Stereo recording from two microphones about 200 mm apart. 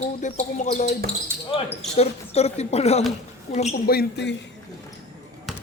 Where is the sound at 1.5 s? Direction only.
25° left (ahead or behind).